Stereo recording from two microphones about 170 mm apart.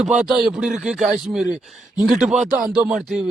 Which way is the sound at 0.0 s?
5° right (ahead or behind).